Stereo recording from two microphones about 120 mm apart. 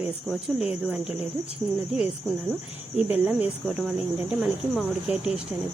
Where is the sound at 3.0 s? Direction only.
10° right (ahead or behind).